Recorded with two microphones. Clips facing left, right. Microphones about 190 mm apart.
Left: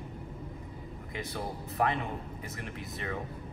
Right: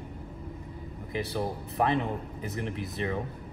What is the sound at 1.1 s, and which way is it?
Speech, 25° right (ahead or behind).